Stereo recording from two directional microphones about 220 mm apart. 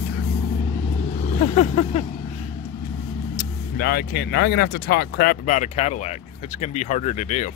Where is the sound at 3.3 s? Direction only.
45° left (ahead or behind).